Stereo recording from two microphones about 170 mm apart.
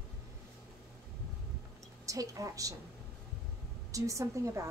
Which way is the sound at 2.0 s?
20° right (ahead or behind).